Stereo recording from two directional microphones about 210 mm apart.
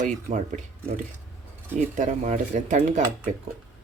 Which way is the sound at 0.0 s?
35° right (ahead or behind).